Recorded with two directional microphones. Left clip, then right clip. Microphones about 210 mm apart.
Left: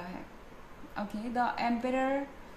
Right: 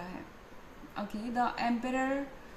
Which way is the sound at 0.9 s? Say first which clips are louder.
Left 1 dB; 15° left (ahead or behind).